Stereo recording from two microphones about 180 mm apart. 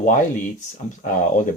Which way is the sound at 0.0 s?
45° left (ahead or behind).